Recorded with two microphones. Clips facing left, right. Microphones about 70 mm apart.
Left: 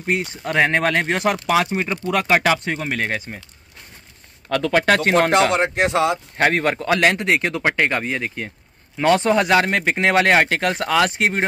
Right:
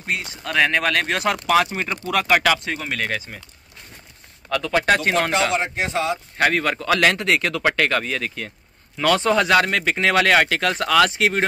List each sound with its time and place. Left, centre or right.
0.0 s speech: left
4.5 s speech: left
6.3 s speech: left